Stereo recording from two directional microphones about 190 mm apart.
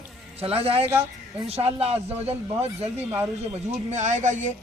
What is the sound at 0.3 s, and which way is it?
A man's voice, 30° right (ahead or behind).